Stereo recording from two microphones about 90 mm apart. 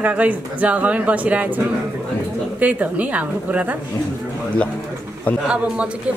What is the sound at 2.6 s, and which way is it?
A woman's voice, 15° right (ahead or behind).